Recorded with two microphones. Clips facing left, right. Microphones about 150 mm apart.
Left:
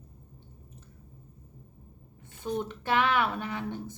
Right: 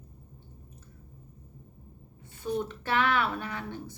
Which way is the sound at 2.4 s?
20° left (ahead or behind).